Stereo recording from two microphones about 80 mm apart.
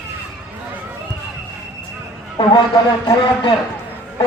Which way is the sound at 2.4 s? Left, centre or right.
Left.